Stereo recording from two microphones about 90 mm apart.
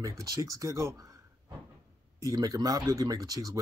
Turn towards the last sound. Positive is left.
turn(degrees=-45)  # may be behind; listen again after turning